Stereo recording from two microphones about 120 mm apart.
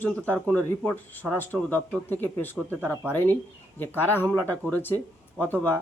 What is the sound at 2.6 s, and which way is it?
Speech, 20° right (ahead or behind).